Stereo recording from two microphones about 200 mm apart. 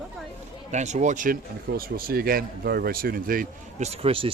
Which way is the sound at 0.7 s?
35° right (ahead or behind).